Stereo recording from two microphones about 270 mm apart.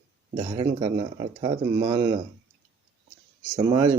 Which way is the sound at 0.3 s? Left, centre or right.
Centre.